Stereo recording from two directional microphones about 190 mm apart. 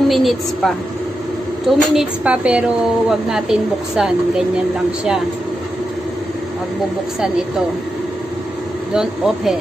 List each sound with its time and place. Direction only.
0.1 s a woman's voice: centre (ahead or behind)
8.9 s a woman's voice: centre (ahead or behind)